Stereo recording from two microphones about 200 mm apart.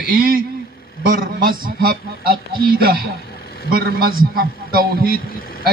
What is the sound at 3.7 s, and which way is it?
A man's voice, 50° right (ahead or behind).